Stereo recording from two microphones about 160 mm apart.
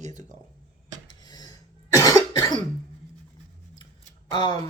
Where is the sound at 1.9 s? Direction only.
20° left (ahead or behind).